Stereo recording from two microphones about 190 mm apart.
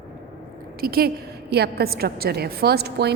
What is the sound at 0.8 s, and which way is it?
A woman's voice, 55° right (ahead or behind).